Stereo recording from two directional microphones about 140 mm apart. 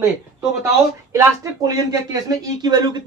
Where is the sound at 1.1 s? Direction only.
25° right (ahead or behind).